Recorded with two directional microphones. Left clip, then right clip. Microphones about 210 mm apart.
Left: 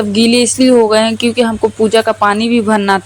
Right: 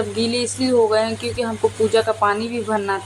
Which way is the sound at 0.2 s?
35° left (ahead or behind).